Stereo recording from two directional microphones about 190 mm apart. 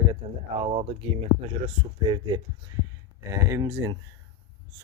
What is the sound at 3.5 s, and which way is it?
Speech, 15° right (ahead or behind).